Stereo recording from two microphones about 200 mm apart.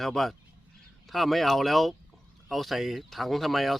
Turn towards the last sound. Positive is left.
turn(degrees=0)  # may be behind; listen again after turning